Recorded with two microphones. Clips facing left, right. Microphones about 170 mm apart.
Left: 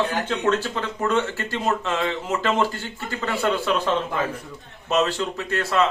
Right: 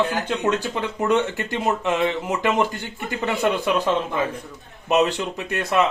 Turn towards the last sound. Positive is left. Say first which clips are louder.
# right 1 dB
turn(degrees=-15)  # may be behind; listen again after turning